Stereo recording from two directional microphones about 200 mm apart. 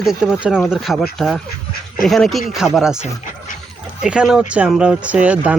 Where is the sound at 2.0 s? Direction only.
Centre (ahead or behind).